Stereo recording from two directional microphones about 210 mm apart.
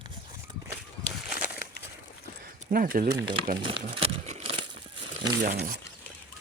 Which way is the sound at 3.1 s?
15° right (ahead or behind).